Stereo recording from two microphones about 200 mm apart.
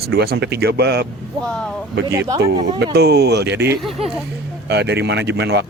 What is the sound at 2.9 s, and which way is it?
Speech, 55° right (ahead or behind).